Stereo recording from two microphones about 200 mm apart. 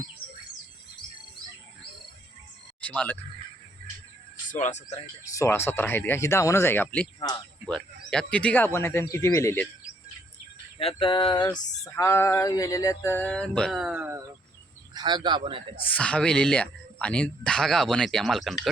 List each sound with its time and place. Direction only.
2.8 s speech: 5° left (ahead or behind)
4.4 s speech: 40° left (ahead or behind)
5.4 s speech: 10° left (ahead or behind)
7.2 s a sound: 20° left (ahead or behind)
7.7 s speech: 5° left (ahead or behind)
10.8 s a sound: 25° left (ahead or behind)
11.5 s speech: 15° left (ahead or behind); by 14.2 s 5° right (ahead or behind)
14.9 s a man's voice: 20° right (ahead or behind)
15.7 s speech: 5° left (ahead or behind)